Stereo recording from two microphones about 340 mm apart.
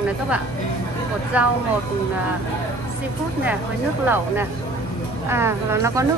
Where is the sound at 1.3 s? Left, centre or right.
Centre.